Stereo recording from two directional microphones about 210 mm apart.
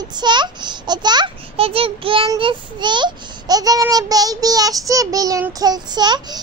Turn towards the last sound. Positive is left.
turn(degrees=-20)  # may be behind; listen again after turning